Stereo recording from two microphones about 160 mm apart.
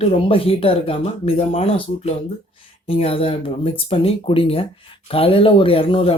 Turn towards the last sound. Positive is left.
turn(degrees=35)  # may be behind; listen again after turning